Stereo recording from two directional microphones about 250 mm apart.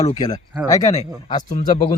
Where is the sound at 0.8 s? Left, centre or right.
Left.